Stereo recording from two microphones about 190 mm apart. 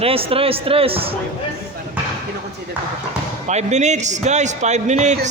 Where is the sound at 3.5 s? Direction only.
35° right (ahead or behind).